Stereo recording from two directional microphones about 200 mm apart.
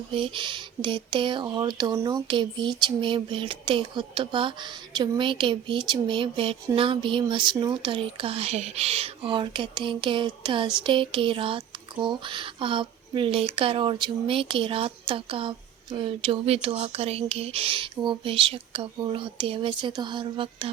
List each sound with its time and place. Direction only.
0.1 s speech: 25° right (ahead or behind)